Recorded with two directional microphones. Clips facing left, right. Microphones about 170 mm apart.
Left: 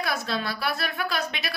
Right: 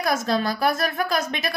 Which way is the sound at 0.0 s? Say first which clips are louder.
Right 6 dB; 45° right (ahead or behind).